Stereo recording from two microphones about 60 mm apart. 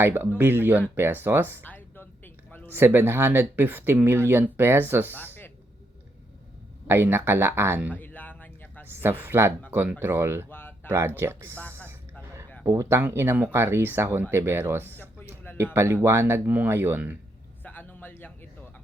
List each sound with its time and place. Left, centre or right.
0.0 s speech: right
1.6 s music: left
2.6 s speech: right
5.1 s a sound: left
6.8 s speech: right
7.9 s a sound: left
8.9 s speech: right
10.5 s a sound: left
11.2 s speech: right
12.6 s speech: right
13.0 s speech: right
17.6 s a sound: left